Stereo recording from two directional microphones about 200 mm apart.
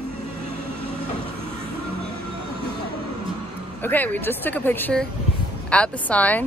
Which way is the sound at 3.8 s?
10° left (ahead or behind).